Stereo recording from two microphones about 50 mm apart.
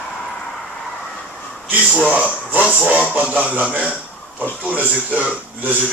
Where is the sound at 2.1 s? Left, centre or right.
Right.